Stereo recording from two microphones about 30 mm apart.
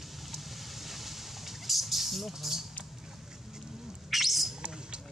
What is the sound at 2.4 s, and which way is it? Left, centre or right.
Speech, centre.